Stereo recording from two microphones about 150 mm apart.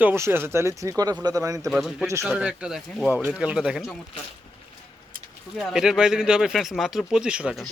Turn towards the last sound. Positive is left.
turn(degrees=-5)  # may be behind; listen again after turning